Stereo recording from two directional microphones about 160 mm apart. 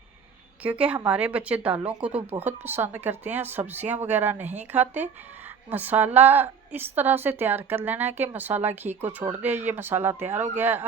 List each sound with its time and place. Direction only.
0.6 s a woman's voice: 10° right (ahead or behind)